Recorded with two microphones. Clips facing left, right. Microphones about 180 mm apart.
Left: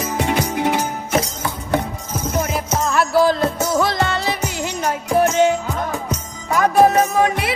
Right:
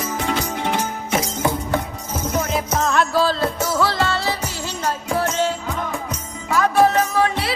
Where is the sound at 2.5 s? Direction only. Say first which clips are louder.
Right 1 dB; centre (ahead or behind); by 5.5 s 20° left (ahead or behind).